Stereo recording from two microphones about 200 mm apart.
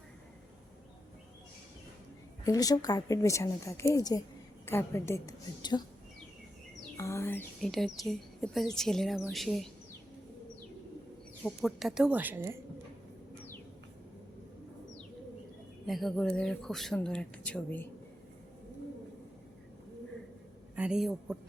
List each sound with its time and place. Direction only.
2.4 s speech: 20° left (ahead or behind)
6.9 s speech: 15° left (ahead or behind)
11.4 s speech: centre (ahead or behind)
15.9 s speech: centre (ahead or behind)
20.7 s a man's voice: 5° right (ahead or behind)